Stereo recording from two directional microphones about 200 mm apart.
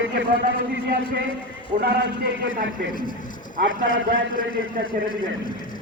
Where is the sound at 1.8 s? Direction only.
60° right (ahead or behind).